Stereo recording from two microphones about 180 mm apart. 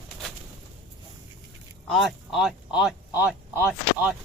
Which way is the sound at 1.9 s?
Centre (ahead or behind).